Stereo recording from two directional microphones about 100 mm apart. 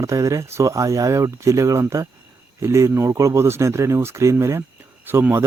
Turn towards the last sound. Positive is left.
turn(degrees=-25)  # may be behind; listen again after turning